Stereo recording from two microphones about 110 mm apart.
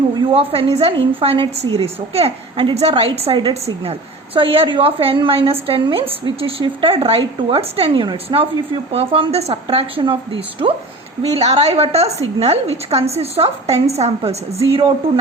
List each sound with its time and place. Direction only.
0.3 s a woman's voice: 60° right (ahead or behind)
4.4 s a woman's voice: 55° right (ahead or behind)
11.2 s a woman's voice: 70° right (ahead or behind)